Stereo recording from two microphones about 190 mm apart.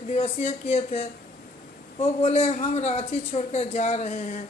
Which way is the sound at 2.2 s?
35° left (ahead or behind).